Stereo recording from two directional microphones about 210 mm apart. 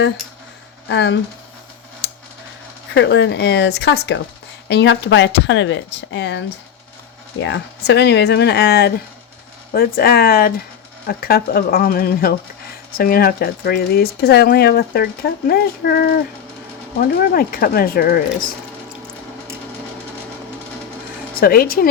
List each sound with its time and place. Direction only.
0.9 s speech: 55° left (ahead or behind)
2.9 s speech: 60° left (ahead or behind)
7.4 s speech: 55° left (ahead or behind)
17.2 s speech: 45° left (ahead or behind)
21.4 s speech: 45° left (ahead or behind)